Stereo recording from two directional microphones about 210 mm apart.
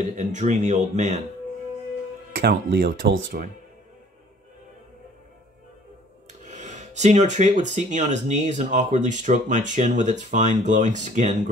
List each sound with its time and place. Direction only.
0.1 s speech: 35° right (ahead or behind)
2.4 s speech: 45° right (ahead or behind)
6.4 s speech: 35° right (ahead or behind)